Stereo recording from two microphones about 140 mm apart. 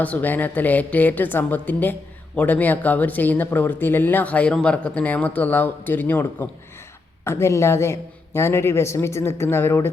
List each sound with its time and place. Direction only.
0.0 s a woman's voice: 10° left (ahead or behind)